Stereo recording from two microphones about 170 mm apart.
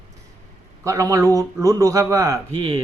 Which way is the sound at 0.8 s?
20° right (ahead or behind).